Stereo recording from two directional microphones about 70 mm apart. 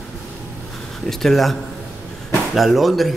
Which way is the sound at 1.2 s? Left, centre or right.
Centre.